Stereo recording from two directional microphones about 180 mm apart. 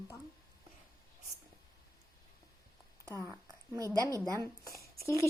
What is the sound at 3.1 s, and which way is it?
Speech, 15° right (ahead or behind).